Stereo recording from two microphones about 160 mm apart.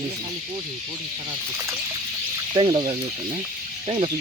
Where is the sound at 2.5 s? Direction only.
35° right (ahead or behind).